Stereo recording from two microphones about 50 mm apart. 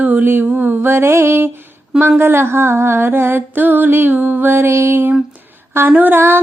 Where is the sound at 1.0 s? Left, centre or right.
Right.